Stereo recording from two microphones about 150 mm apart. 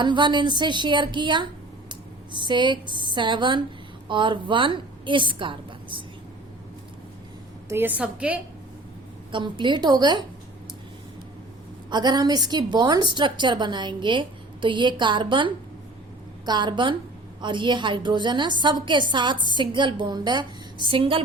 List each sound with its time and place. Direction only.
0.0 s a woman's voice: 30° right (ahead or behind)
7.7 s a woman's voice: 15° right (ahead or behind)
9.3 s a woman's voice: 30° right (ahead or behind)
11.9 s a woman's voice: 30° right (ahead or behind)